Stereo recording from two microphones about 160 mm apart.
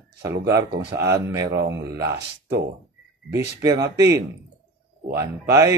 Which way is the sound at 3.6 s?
20° right (ahead or behind).